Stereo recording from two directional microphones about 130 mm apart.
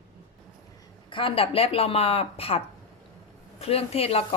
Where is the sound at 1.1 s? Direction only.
45° left (ahead or behind).